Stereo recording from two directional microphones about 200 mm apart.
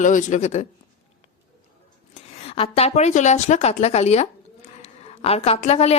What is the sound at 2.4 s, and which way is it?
A woman's voice, 30° left (ahead or behind).